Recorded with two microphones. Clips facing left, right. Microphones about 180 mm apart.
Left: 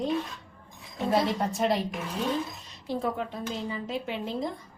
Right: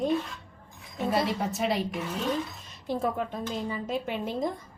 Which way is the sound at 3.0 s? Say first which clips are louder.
Right 2 dB; 45° right (ahead or behind).